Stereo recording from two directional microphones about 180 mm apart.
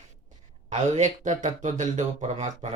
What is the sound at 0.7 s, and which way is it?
Speech, 40° right (ahead or behind).